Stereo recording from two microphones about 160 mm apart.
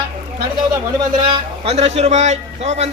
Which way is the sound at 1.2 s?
35° right (ahead or behind).